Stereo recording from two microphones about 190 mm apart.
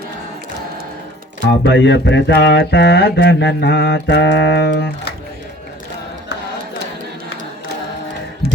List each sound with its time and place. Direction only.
1.5 s mantra: 65° left (ahead or behind)